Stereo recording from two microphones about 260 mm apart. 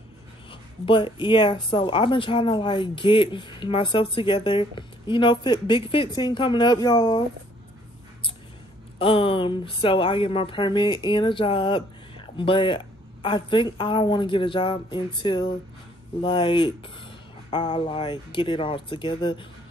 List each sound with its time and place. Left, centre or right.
0.5 s speech: centre
8.9 s speech: left